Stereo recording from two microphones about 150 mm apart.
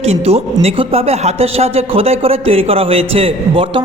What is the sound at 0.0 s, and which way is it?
A man's voice, 45° right (ahead or behind).